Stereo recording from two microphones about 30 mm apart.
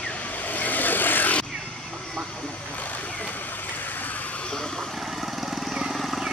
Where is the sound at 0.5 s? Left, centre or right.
Left.